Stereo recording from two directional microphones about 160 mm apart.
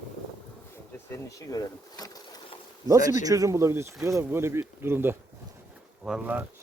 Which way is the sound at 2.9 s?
20° right (ahead or behind).